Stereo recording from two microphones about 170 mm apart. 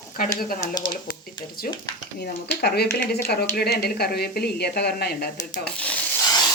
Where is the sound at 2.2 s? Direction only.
65° left (ahead or behind).